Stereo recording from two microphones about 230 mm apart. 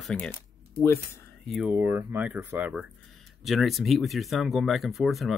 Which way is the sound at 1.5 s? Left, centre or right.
Centre.